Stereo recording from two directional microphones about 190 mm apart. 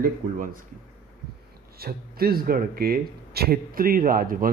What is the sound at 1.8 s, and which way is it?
Speech, 55° right (ahead or behind).